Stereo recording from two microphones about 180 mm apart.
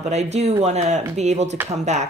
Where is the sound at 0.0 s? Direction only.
40° right (ahead or behind).